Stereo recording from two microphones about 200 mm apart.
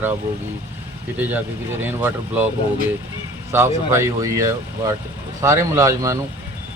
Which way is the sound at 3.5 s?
15° right (ahead or behind).